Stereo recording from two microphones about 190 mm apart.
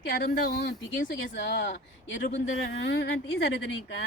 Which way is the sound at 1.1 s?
80° left.